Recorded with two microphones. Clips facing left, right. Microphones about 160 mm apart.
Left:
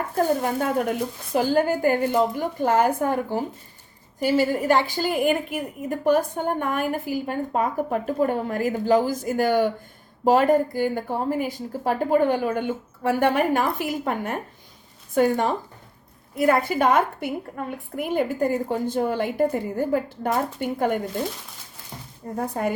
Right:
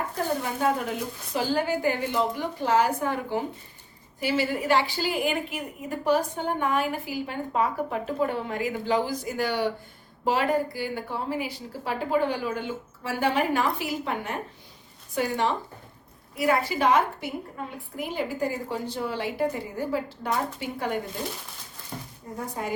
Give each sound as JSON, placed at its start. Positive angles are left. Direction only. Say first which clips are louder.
{"t": 0.4, "sound": "a woman's voice", "louder": "left 3 dB", "side_deg": 50}
{"t": 22.4, "sound": "a woman's voice", "louder": "left 7 dB", "side_deg": 55}